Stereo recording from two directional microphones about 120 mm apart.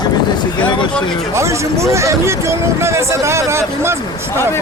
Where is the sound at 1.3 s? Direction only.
25° right (ahead or behind).